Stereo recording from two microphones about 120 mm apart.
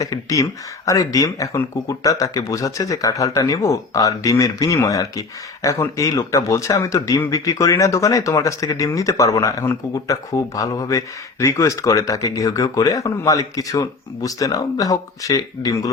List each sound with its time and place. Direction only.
0.0 s speech: 30° left (ahead or behind)